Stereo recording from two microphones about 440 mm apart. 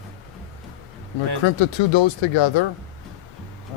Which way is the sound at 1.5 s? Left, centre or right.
Left.